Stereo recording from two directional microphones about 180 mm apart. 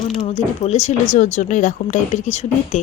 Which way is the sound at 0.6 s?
40° left (ahead or behind).